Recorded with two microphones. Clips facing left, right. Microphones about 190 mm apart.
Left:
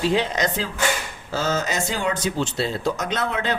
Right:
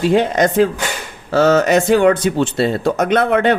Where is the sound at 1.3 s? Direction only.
65° right (ahead or behind).